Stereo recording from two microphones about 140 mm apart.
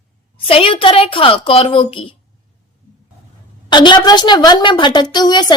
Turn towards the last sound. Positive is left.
turn(degrees=30)  # may be behind; listen again after turning